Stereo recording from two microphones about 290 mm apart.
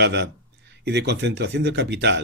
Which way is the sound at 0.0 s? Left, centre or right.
Right.